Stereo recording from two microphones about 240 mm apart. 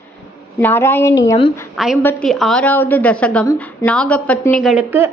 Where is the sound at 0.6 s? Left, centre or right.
Centre.